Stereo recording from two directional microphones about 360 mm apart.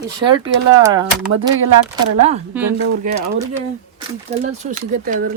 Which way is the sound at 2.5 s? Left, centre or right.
Centre.